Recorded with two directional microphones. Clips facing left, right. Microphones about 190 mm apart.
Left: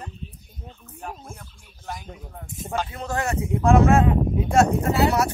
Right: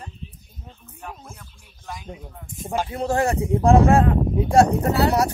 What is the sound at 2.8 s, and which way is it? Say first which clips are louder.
Speech: right 6 dB; 30° right (ahead or behind).